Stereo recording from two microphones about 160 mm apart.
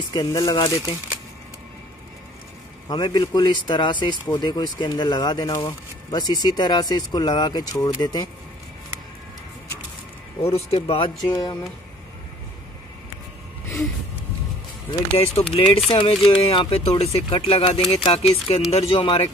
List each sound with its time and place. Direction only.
0.1 s speech: 25° left (ahead or behind)
2.9 s speech: 25° left (ahead or behind)
10.4 s speech: 40° left (ahead or behind)
11.2 s speech: 25° left (ahead or behind)
15.1 s speech: 35° left (ahead or behind)